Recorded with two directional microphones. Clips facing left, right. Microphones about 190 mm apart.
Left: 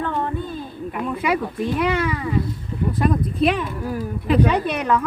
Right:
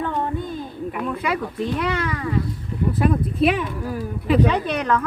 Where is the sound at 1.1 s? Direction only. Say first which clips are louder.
Left 2 dB; 10° left (ahead or behind).